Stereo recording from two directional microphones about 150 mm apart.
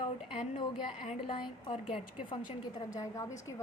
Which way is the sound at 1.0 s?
35° left (ahead or behind).